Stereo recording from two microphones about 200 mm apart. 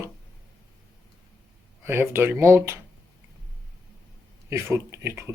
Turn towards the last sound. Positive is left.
turn(degrees=-15)  # may be behind; listen again after turning